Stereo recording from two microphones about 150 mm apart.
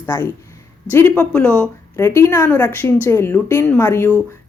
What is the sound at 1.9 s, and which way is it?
Speech, 15° left (ahead or behind).